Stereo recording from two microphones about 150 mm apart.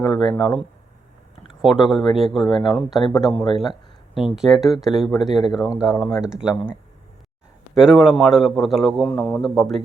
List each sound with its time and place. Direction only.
0.0 s speech: 30° left (ahead or behind)
0.3 s speech: 5° left (ahead or behind)
1.6 s speech: centre (ahead or behind)
3.4 s a man's voice: 30° left (ahead or behind)
4.1 s speech: centre (ahead or behind)
7.8 s speech: 5° right (ahead or behind)